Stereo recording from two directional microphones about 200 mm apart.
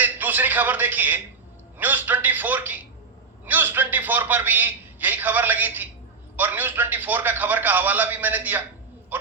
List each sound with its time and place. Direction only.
0.0 s a man's voice: 10° right (ahead or behind)